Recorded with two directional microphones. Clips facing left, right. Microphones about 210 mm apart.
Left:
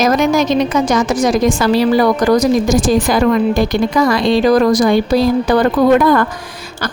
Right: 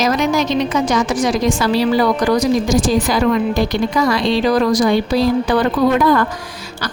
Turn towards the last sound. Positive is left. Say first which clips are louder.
# left 3 dB
turn(degrees=50)  # may be behind; listen again after turning